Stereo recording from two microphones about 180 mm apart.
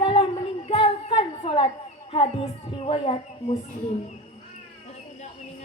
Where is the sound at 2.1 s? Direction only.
30° left (ahead or behind).